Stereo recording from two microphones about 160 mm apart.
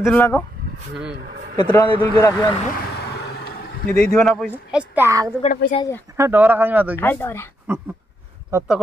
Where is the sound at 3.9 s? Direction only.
5° left (ahead or behind); by 6.9 s 10° right (ahead or behind).